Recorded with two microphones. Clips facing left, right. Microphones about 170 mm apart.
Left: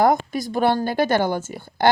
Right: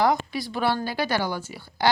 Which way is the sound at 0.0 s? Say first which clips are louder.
Left 4 dB; 50° left (ahead or behind).